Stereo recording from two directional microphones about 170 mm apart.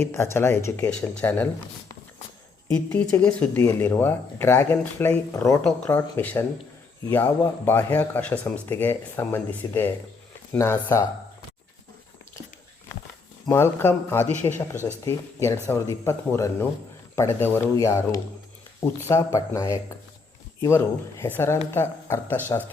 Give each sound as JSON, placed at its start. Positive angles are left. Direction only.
{"t": 0.0, "sound": "speech", "side_deg": 15}
{"t": 3.2, "sound": "speech", "side_deg": 15}
{"t": 7.6, "sound": "speech", "side_deg": 10}
{"t": 13.5, "sound": "speech", "side_deg": 15}